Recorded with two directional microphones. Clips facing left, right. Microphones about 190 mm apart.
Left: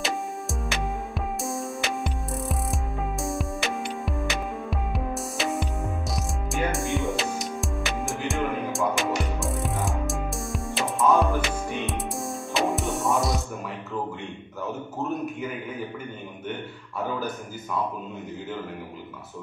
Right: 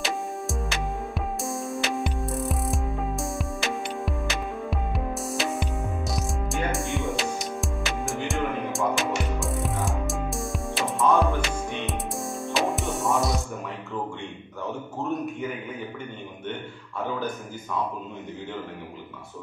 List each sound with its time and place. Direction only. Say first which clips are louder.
0.0 s music: even; centre (ahead or behind)